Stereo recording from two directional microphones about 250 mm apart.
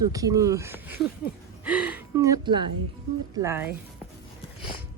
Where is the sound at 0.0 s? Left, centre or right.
Centre.